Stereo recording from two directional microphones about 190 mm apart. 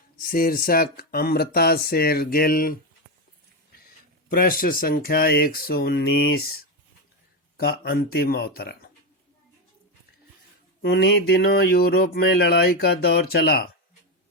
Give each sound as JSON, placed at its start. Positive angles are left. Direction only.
{"t": 0.2, "sound": "speech", "side_deg": 50}
{"t": 4.3, "sound": "speech", "side_deg": 50}
{"t": 7.5, "sound": "speech", "side_deg": 55}
{"t": 10.8, "sound": "speech", "side_deg": 60}